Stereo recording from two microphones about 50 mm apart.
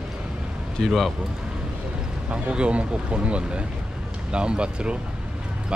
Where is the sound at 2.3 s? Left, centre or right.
Right.